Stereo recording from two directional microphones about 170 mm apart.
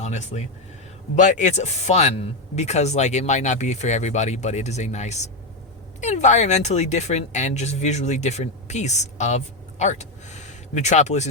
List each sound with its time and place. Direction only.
0.0 s speech: 40° left (ahead or behind)